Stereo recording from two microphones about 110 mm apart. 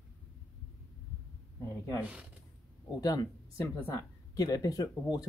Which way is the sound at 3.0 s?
35° left (ahead or behind).